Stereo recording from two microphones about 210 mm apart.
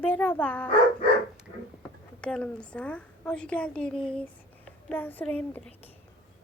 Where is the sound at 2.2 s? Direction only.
5° left (ahead or behind).